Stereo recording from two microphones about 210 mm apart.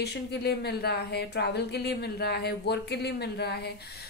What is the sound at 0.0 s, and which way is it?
A woman's voice, 50° left (ahead or behind).